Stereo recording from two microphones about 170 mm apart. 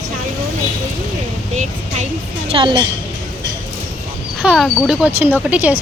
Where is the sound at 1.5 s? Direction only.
45° right (ahead or behind).